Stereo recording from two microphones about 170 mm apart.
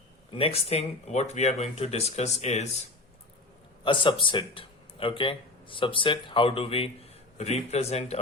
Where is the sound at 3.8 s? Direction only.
30° left (ahead or behind).